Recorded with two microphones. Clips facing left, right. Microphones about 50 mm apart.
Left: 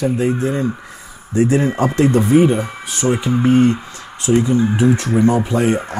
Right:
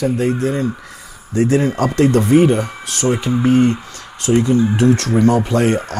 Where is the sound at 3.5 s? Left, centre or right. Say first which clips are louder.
Even; left.